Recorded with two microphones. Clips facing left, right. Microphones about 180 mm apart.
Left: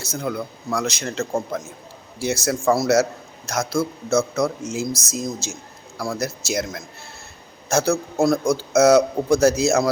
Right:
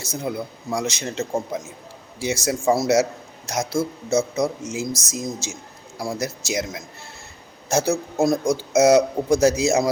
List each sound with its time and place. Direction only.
0.0 s a man's voice: 15° right (ahead or behind)